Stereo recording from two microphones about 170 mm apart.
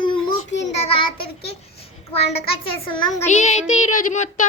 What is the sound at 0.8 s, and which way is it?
Child singing, 35° left (ahead or behind).